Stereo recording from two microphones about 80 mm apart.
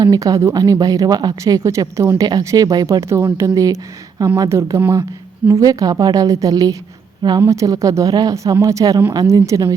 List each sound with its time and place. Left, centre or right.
0.0 s speech: right
1.4 s speech: right
2.1 s speech: right
2.4 s speech: right
7.2 s speech: right
7.4 s speech: right